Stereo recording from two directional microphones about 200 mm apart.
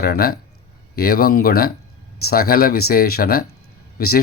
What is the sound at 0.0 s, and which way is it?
Speech, 50° left (ahead or behind).